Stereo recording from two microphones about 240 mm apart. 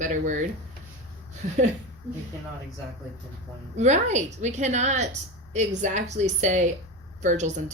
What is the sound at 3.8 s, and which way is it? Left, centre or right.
A woman's voice, right.